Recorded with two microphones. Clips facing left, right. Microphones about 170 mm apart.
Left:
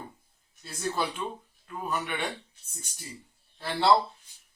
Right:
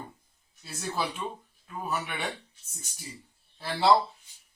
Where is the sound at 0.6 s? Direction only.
Centre (ahead or behind).